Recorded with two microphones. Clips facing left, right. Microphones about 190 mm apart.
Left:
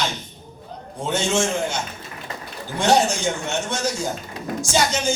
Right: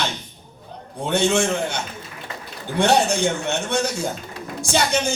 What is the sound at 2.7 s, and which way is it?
Speech, 60° right (ahead or behind).